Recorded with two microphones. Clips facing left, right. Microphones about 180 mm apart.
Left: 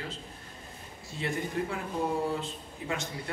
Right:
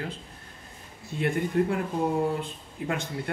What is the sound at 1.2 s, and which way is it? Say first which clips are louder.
Speech: right 7 dB; 55° right (ahead or behind).